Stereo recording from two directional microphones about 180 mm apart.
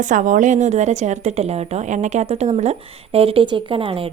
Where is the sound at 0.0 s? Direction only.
45° right (ahead or behind).